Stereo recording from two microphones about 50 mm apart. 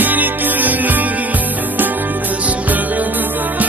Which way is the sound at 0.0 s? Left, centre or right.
Right.